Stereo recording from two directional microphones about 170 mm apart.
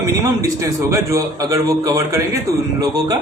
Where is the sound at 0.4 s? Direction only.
20° right (ahead or behind).